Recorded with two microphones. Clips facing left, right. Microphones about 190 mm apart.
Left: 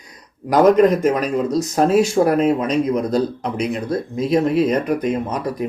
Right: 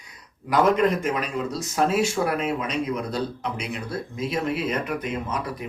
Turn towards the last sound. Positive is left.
turn(degrees=40)  # may be behind; listen again after turning